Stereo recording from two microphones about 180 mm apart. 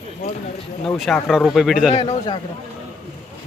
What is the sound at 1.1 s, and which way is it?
Speech, 5° left (ahead or behind).